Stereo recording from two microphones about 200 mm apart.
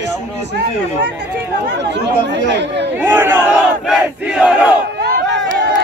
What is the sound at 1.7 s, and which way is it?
Speech, 60° right (ahead or behind).